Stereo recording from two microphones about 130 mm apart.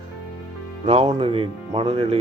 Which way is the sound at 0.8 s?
45° right (ahead or behind).